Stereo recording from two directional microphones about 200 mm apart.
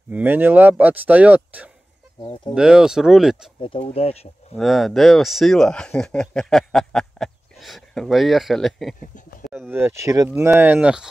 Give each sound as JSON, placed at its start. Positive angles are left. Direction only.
{"t": 0.1, "sound": "speech", "side_deg": -10}
{"t": 2.2, "sound": "speech", "side_deg": 25}
{"t": 2.5, "sound": "speech", "side_deg": -5}
{"t": 3.6, "sound": "speech", "side_deg": 30}
{"t": 4.6, "sound": "speech", "side_deg": 0}